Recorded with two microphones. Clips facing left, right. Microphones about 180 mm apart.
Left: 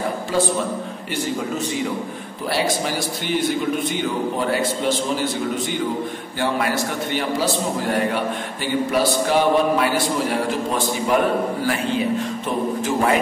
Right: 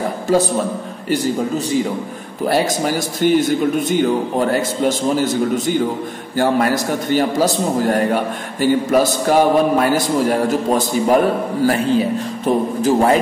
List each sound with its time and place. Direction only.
0.3 s a man's voice: 45° right (ahead or behind)